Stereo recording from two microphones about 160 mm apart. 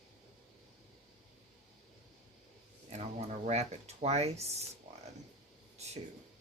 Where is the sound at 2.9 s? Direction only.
40° right (ahead or behind).